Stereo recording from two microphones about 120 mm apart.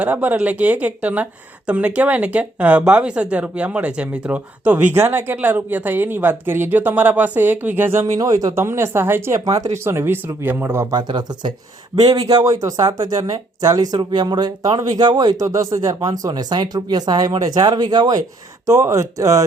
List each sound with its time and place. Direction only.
0.0 s speech: 15° right (ahead or behind)
8.2 s speech: 30° right (ahead or behind)
10.9 s speech: 40° right (ahead or behind)